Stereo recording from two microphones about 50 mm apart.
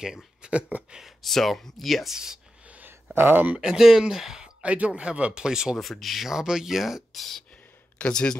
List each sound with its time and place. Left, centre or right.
0.0 s speech: centre
0.5 s speech: right
1.2 s speech: centre
2.1 s speech: centre
3.2 s speech: right
3.6 s speech: centre
4.6 s speech: right
5.8 s speech: centre
8.0 s speech: centre